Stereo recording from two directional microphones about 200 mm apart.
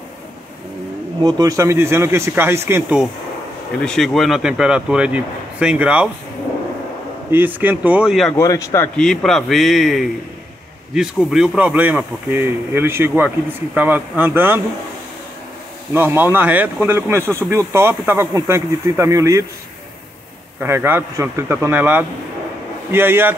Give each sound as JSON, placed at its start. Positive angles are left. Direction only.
{"t": 1.2, "sound": "speech", "side_deg": -15}
{"t": 3.8, "sound": "a man's voice", "side_deg": 0}
{"t": 7.2, "sound": "speech", "side_deg": -10}
{"t": 8.4, "sound": "a man's voice", "side_deg": 15}
{"t": 8.9, "sound": "a man's voice", "side_deg": 5}
{"t": 15.9, "sound": "speech", "side_deg": -10}
{"t": 20.6, "sound": "speech", "side_deg": -10}